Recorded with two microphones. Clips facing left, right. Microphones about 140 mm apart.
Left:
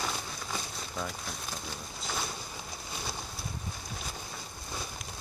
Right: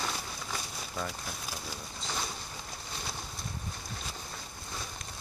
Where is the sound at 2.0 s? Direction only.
5° left (ahead or behind).